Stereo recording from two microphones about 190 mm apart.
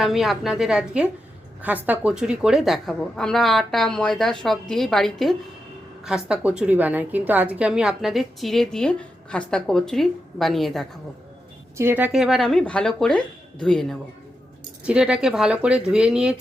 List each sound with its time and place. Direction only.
0.0 s a woman's voice: centre (ahead or behind)
11.8 s a woman's voice: 10° right (ahead or behind)